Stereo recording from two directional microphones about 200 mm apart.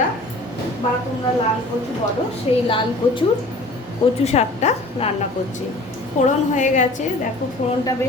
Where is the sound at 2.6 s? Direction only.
25° left (ahead or behind).